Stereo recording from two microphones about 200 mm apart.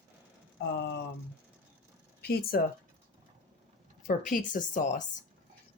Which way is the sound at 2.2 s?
50° left (ahead or behind).